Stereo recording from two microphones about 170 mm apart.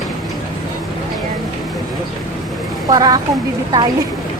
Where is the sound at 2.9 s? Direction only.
25° right (ahead or behind).